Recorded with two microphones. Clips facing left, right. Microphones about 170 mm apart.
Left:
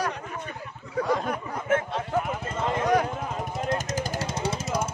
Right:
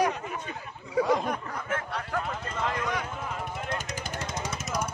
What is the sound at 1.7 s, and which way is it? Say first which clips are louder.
Speech: left 8 dB; 25° left (ahead or behind).